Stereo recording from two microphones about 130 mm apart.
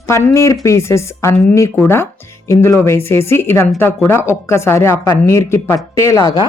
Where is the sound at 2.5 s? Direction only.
20° left (ahead or behind).